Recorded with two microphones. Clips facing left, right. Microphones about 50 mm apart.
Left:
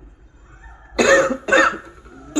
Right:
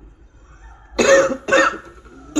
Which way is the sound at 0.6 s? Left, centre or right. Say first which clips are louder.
Even; centre.